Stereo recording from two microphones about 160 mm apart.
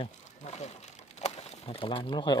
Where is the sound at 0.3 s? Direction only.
45° left (ahead or behind).